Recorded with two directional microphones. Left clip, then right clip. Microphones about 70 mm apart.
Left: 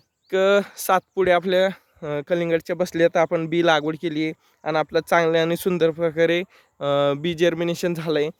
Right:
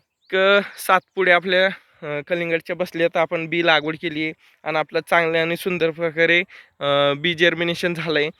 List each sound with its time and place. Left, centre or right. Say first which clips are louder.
0.3 s speech: right 2 dB; left
2.0 s speech: even; left
3.3 s speech: even; left
3.6 s speech: right 2 dB; left
6.0 s speech: right 2 dB; left; by 8.3 s centre